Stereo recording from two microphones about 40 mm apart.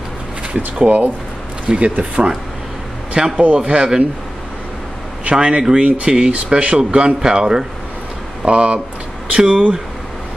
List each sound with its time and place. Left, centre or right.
0.7 s speech: right
3.2 s speech: centre
5.3 s speech: right
5.9 s speech: right
6.1 s speech: right